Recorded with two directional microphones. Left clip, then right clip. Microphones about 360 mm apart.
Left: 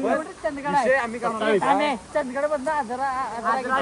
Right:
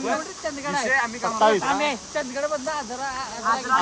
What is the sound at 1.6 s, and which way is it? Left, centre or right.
Speech, left.